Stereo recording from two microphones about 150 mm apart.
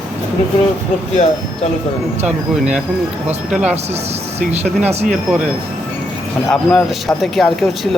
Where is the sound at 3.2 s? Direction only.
5° right (ahead or behind).